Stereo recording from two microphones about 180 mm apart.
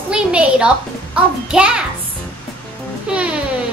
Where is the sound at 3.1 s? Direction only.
5° right (ahead or behind).